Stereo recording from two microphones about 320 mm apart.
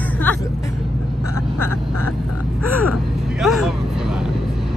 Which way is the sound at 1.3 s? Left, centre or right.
Centre.